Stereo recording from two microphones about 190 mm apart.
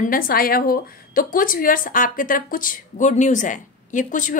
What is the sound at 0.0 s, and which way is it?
A woman's voice, 50° left (ahead or behind).